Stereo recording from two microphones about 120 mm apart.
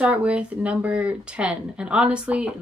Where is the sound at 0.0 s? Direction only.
10° right (ahead or behind).